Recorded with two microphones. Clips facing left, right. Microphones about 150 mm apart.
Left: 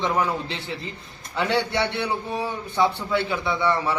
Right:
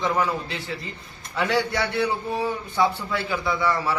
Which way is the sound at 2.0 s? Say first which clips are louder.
Right 2 dB; centre (ahead or behind).